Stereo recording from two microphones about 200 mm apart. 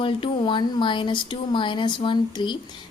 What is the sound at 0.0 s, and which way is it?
Speech, 25° left (ahead or behind).